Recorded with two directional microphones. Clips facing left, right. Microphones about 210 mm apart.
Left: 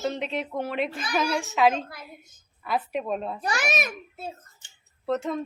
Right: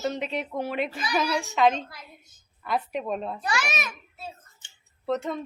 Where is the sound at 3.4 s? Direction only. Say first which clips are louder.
Left 2 dB; 50° left (ahead or behind).